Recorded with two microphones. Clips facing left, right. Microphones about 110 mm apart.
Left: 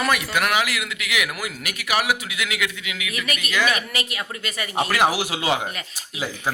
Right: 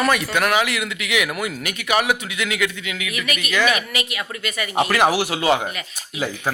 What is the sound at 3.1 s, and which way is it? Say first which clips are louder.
Speech: right 2 dB; 35° left (ahead or behind).